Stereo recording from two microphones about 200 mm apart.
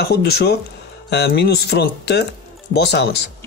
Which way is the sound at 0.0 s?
55° left (ahead or behind).